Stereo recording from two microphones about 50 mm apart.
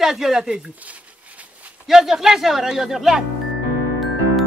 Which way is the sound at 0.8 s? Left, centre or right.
Right.